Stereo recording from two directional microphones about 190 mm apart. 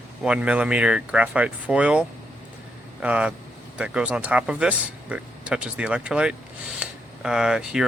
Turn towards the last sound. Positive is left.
turn(degrees=-5)  # may be behind; listen again after turning